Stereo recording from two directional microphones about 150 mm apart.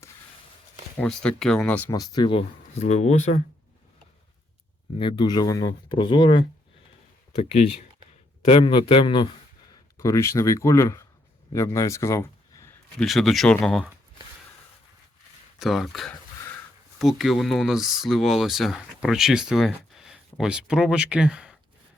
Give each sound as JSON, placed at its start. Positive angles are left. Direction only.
{"t": 0.9, "sound": "speech", "side_deg": 5}
{"t": 1.9, "sound": "speech", "side_deg": 25}
{"t": 2.8, "sound": "speech", "side_deg": 50}
{"t": 4.9, "sound": "speech", "side_deg": 30}
{"t": 7.3, "sound": "speech", "side_deg": 45}
{"t": 10.0, "sound": "speech", "side_deg": 20}
{"t": 13.0, "sound": "speech", "side_deg": 0}
{"t": 15.5, "sound": "speech", "side_deg": 0}